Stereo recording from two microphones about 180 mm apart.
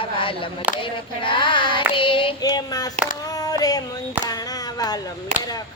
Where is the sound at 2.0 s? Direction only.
30° left (ahead or behind).